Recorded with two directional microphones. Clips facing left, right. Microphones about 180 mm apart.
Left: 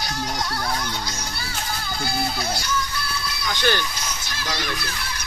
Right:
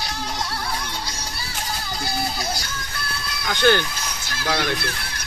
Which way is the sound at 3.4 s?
55° right (ahead or behind).